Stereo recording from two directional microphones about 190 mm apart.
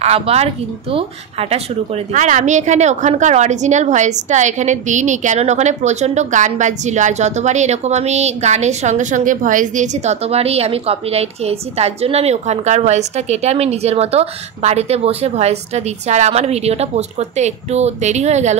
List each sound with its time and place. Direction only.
0.0 s a woman's voice: 35° right (ahead or behind)